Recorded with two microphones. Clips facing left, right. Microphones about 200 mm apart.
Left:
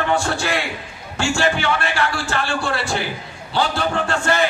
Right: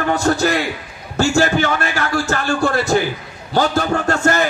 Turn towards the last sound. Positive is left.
turn(degrees=-45)  # may be behind; listen again after turning